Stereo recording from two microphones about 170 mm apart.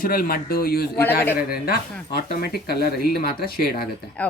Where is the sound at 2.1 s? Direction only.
70° left (ahead or behind).